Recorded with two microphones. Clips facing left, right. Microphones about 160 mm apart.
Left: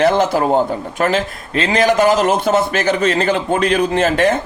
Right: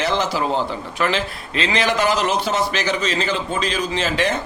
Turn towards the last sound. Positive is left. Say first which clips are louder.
# left 7 dB
turn(degrees=50)  # may be behind; listen again after turning